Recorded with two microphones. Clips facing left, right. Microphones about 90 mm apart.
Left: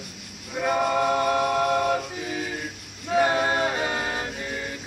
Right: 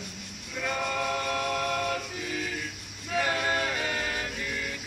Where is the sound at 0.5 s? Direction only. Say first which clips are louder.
Left 8 dB; 40° left (ahead or behind).